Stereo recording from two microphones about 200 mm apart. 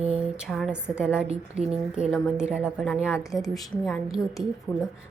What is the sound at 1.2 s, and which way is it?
Speech, 30° right (ahead or behind).